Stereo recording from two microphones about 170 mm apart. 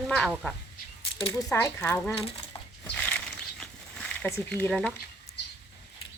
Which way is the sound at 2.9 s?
5° left (ahead or behind).